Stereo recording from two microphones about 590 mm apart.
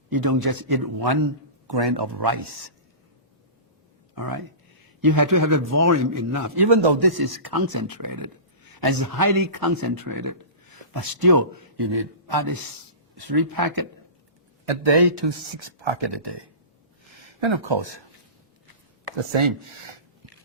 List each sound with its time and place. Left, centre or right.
0.1 s speech: right
4.1 s speech: right
6.7 s speech: right
14.6 s speech: right
19.2 s speech: right